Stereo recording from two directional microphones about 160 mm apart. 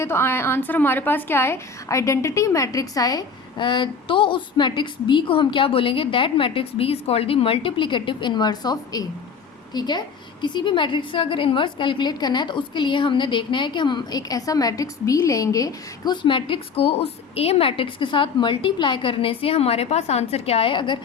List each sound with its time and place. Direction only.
0.0 s a woman's voice: 15° left (ahead or behind); by 21.0 s 30° left (ahead or behind)